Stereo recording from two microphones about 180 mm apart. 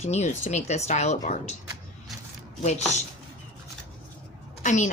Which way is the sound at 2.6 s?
40° left (ahead or behind).